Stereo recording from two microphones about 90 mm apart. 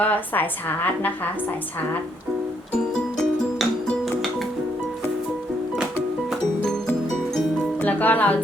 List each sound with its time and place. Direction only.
0.0 s a woman's voice: 20° left (ahead or behind)
3.2 s music: centre (ahead or behind)
6.6 s music: 10° left (ahead or behind)